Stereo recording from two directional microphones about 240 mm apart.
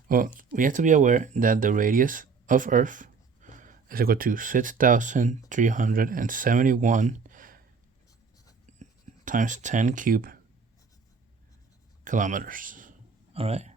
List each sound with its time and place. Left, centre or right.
0.1 s speech: right
8.8 s speech: right
12.0 s speech: right